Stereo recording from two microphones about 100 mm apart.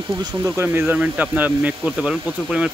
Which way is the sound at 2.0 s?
5° right (ahead or behind).